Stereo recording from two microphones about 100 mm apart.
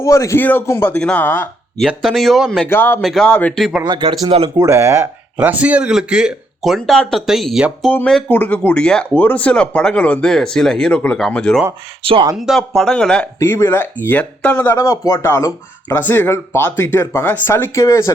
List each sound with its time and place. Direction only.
0.0 s a man's voice: 30° left (ahead or behind)
2.0 s speech: centre (ahead or behind)
2.6 s speech: 20° left (ahead or behind)
3.0 s speech: centre (ahead or behind)
3.2 s speech: 15° left (ahead or behind)
3.8 s speech: 55° right (ahead or behind)
4.4 s speech: 45° right (ahead or behind)
4.7 s speech: 25° right (ahead or behind)
5.4 s speech: 15° right (ahead or behind)
8.3 s speech: 15° left (ahead or behind)
13.4 s speech: 25° left (ahead or behind)
14.8 s speech: 30° left (ahead or behind)